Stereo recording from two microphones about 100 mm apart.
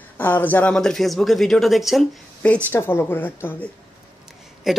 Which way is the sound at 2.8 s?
25° left (ahead or behind).